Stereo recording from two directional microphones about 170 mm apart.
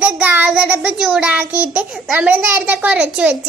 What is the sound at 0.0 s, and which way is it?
Child singing, 10° right (ahead or behind).